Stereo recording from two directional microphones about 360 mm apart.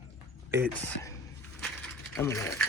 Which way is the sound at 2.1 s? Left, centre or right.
Centre.